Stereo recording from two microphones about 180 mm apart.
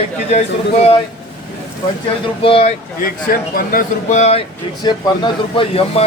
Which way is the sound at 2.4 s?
30° left (ahead or behind).